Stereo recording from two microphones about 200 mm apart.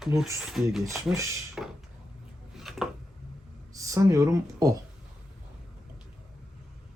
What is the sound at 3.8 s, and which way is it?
Speech, 15° right (ahead or behind).